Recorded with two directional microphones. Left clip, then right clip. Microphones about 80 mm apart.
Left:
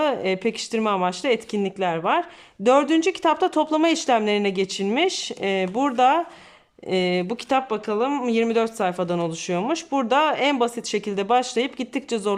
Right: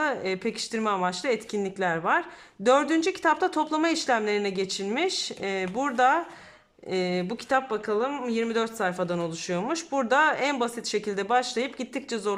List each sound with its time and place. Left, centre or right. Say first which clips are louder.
0.0 s speech: left 5 dB; left